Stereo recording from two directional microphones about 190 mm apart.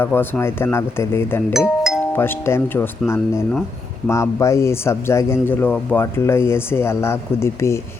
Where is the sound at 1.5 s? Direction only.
Centre (ahead or behind).